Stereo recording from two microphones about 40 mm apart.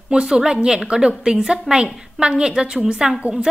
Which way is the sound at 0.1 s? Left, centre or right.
Centre.